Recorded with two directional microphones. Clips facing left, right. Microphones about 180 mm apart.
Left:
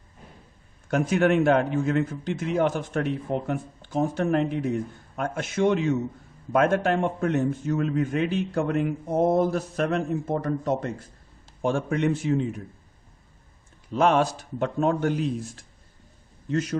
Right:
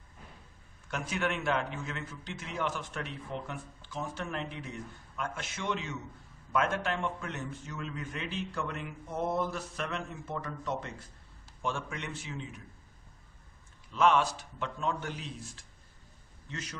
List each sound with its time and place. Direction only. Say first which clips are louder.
0.9 s a man's voice: left 12 dB; 50° left (ahead or behind)
13.9 s a man's voice: left 5 dB; 45° left (ahead or behind)